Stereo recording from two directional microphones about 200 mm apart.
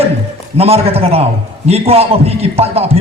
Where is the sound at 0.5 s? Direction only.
30° right (ahead or behind).